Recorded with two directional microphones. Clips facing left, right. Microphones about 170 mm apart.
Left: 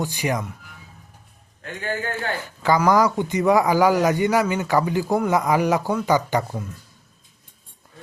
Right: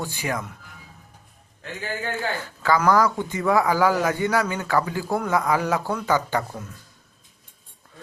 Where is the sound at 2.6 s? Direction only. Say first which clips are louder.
Left 2 dB; 15° left (ahead or behind).